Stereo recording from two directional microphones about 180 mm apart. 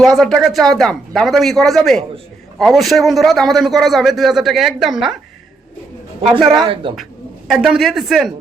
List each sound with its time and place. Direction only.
0.0 s a man's voice: centre (ahead or behind)
6.6 s a woman's voice: 30° right (ahead or behind)
6.9 s speech: centre (ahead or behind)